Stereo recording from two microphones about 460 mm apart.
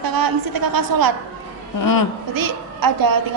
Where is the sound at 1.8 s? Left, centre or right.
Left.